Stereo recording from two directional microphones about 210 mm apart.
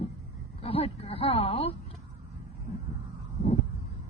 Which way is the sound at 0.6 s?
25° left (ahead or behind).